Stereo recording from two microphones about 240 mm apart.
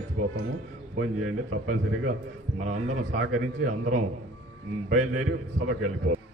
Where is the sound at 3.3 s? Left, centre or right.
Right.